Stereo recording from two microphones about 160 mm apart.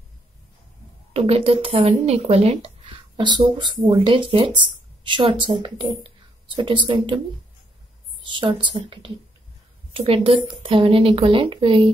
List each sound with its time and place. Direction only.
1.1 s speech: 35° right (ahead or behind)
3.2 s speech: 30° right (ahead or behind)
8.2 s speech: 30° right (ahead or behind)